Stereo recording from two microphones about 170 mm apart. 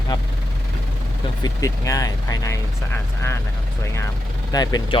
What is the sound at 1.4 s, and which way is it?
Speech, 20° left (ahead or behind).